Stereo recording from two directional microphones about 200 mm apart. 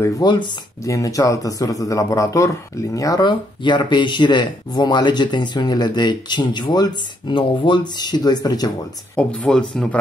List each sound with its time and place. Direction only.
0.0 s speech: 20° left (ahead or behind)
9.1 s speech: 5° left (ahead or behind)